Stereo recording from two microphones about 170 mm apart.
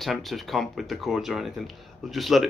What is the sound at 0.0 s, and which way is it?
Speech, centre (ahead or behind).